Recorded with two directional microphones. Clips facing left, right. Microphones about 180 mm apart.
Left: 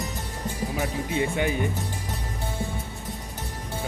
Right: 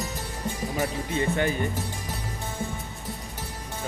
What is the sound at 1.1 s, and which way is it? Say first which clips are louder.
Speech: even; 15° left (ahead or behind).